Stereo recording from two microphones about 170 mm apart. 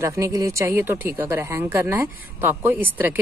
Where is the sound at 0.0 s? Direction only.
20° right (ahead or behind).